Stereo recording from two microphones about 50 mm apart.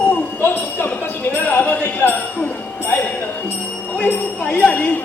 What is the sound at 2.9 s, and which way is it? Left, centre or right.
Music, left.